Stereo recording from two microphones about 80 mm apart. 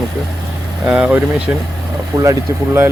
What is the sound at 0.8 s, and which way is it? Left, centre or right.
Speech, centre.